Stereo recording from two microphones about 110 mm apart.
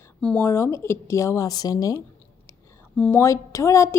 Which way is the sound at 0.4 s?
25° left (ahead or behind).